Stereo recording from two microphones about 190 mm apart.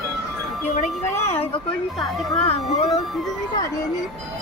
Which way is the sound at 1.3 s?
30° left (ahead or behind).